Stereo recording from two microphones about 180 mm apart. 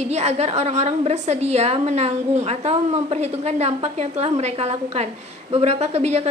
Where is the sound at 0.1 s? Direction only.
35° right (ahead or behind).